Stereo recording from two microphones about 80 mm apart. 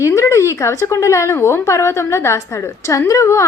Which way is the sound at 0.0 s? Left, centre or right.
Left.